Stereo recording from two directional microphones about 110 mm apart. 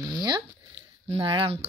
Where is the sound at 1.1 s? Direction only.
55° right (ahead or behind).